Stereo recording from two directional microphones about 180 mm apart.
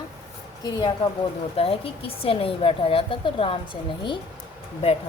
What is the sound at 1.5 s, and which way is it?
A woman's voice, 30° left (ahead or behind).